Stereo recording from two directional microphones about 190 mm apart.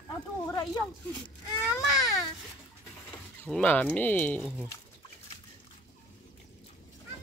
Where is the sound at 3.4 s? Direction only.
5° left (ahead or behind).